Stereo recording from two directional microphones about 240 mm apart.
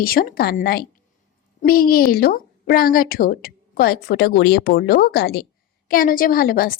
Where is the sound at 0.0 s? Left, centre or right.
Left.